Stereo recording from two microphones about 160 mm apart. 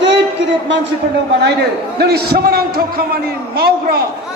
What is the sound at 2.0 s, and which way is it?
A man's voice, 80° right.